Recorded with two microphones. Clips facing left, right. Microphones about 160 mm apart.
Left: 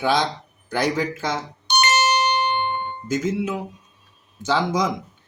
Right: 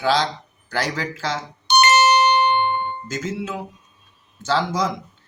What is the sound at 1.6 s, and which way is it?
Doorbell, 65° right (ahead or behind).